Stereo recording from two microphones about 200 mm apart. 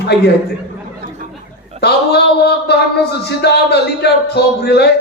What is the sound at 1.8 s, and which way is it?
Speech, 55° left (ahead or behind).